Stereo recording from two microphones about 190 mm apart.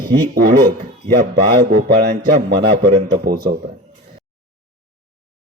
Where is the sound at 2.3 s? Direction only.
55° right (ahead or behind).